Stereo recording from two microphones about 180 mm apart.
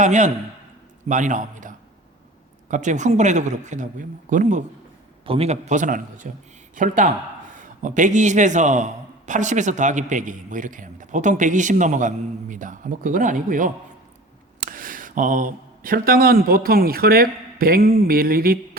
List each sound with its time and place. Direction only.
0.0 s a man's voice: 40° right (ahead or behind)
5.2 s a man's voice: 30° right (ahead or behind); by 18.8 s 55° right (ahead or behind)